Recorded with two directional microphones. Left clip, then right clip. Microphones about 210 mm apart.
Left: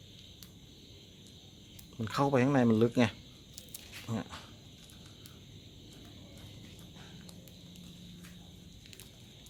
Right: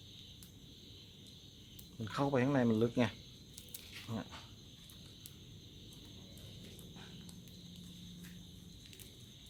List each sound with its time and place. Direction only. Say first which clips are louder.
2.0 s speech: left 6 dB; 40° left (ahead or behind)